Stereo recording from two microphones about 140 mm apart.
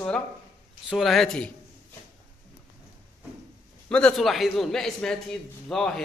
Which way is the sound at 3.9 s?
5° left (ahead or behind).